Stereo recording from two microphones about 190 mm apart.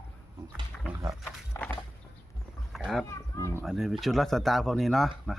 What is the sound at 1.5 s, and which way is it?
Walk, 15° left (ahead or behind).